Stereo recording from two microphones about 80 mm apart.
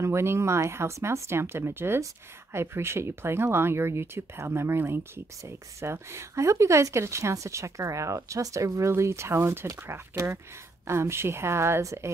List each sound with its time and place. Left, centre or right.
0.0 s speech: right